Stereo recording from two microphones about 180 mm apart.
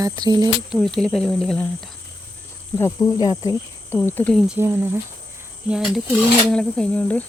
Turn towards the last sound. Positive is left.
turn(degrees=5)  # may be behind; listen again after turning